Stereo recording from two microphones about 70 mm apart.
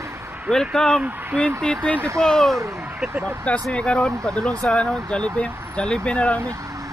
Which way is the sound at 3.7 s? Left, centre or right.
Centre.